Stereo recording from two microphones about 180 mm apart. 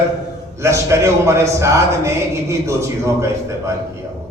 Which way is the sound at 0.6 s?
15° right (ahead or behind).